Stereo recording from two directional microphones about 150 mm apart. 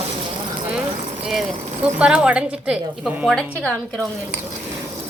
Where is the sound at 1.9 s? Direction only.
5° right (ahead or behind).